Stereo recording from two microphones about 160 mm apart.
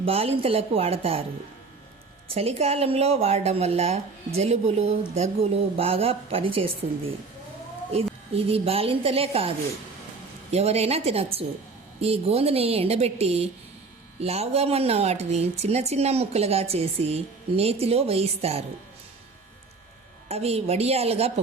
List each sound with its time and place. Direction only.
0.0 s a woman's voice: 35° right (ahead or behind)
2.3 s a woman's voice: 40° right (ahead or behind)
10.5 s a woman's voice: 40° right (ahead or behind)
20.2 s a woman's voice: 40° right (ahead or behind)